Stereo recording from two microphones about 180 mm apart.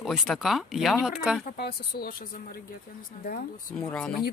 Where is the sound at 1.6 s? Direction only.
60° left (ahead or behind).